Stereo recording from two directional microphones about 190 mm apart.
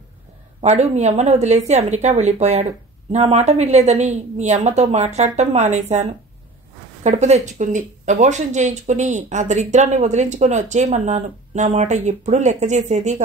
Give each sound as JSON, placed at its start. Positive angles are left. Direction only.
{"t": 0.6, "sound": "speech", "side_deg": -35}